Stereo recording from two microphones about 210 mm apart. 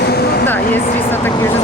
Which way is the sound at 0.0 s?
50° left (ahead or behind).